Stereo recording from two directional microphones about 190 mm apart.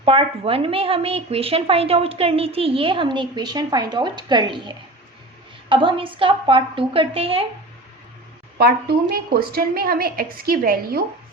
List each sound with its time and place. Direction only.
0.0 s speech: 30° right (ahead or behind)
8.5 s a woman's voice: 55° right (ahead or behind)